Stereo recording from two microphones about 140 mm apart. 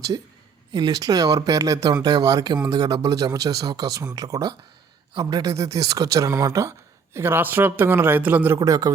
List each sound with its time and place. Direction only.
0.1 s speech: 30° right (ahead or behind); by 8.5 s 10° right (ahead or behind)
8.5 s speech: 25° right (ahead or behind)